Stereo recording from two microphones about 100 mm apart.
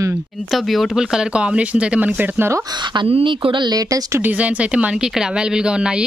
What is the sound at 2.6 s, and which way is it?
Speech, 50° right (ahead or behind).